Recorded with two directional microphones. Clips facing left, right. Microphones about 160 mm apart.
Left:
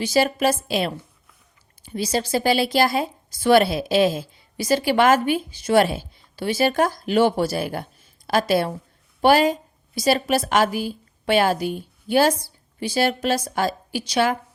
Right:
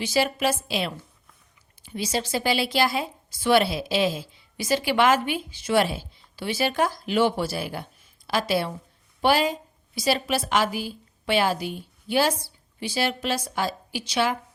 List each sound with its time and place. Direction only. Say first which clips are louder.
0.0 s a woman's voice: left 4 dB; 40° left (ahead or behind)